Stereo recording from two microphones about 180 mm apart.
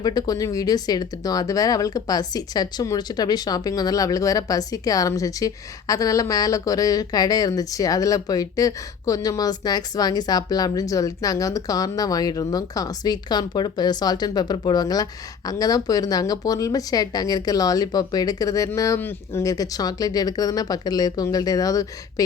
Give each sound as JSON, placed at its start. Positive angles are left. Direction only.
{"t": 0.0, "sound": "a woman's voice", "side_deg": 20}